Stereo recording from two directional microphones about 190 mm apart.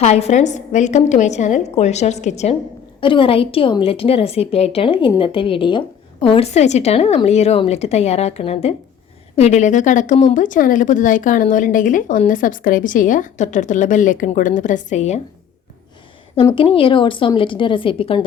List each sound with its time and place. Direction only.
0.0 s a woman's voice: 35° left (ahead or behind)
16.6 s speech: 30° left (ahead or behind)